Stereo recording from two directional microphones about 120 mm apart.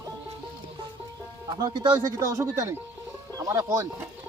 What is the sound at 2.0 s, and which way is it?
Speech, 25° right (ahead or behind).